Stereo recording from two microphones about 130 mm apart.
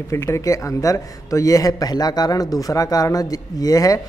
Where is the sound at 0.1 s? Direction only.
25° left (ahead or behind).